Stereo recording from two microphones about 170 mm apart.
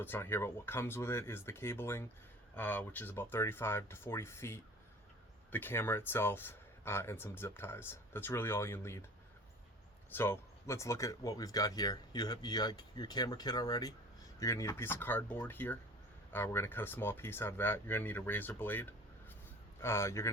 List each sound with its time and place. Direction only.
0.0 s speech: 10° left (ahead or behind)
10.1 s speech: 15° left (ahead or behind)